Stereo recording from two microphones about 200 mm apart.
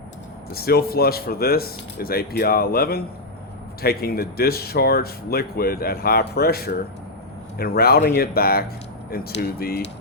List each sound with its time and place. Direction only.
0.5 s speech: 50° left (ahead or behind)